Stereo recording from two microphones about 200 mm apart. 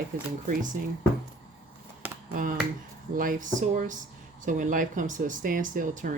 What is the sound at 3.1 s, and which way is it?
Speech, 40° right (ahead or behind).